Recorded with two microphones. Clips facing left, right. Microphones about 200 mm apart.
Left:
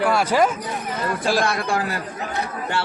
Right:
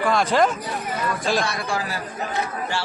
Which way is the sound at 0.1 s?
10° left (ahead or behind).